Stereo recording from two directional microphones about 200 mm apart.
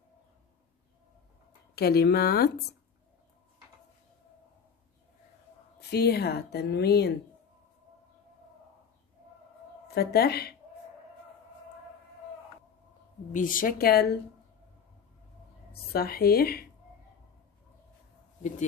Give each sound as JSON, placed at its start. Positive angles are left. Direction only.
{"t": 1.8, "sound": "a woman's voice", "side_deg": 50}
{"t": 5.8, "sound": "a woman's voice", "side_deg": 55}
{"t": 9.9, "sound": "a woman's voice", "side_deg": 50}
{"t": 13.3, "sound": "a woman's voice", "side_deg": 40}
{"t": 15.7, "sound": "a woman's voice", "side_deg": 50}